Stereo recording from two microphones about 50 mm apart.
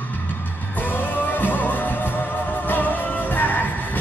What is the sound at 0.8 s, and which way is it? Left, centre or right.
Music, left.